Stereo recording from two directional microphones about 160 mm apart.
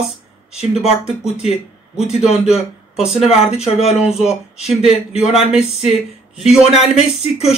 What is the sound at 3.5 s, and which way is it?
Speech, 40° left (ahead or behind).